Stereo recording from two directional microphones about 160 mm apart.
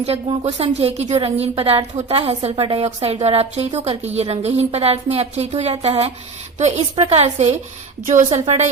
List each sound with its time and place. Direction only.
0.0 s a woman's voice: 35° right (ahead or behind)